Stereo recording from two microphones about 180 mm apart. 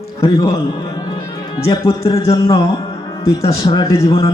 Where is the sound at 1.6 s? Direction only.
20° left (ahead or behind).